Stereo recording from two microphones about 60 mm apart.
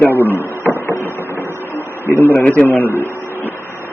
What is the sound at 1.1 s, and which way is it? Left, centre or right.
Guitar, left.